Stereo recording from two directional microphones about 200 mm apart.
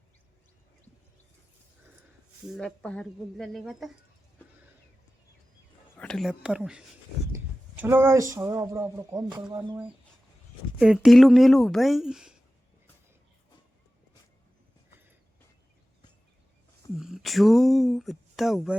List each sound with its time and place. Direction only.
2.5 s speech: 5° left (ahead or behind)
6.0 s speech: 5° left (ahead or behind); by 9.7 s 20° right (ahead or behind)
10.8 s speech: 5° right (ahead or behind)
17.0 s speech: centre (ahead or behind)